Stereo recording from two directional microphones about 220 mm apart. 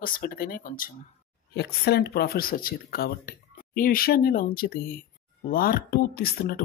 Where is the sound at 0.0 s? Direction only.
40° left (ahead or behind).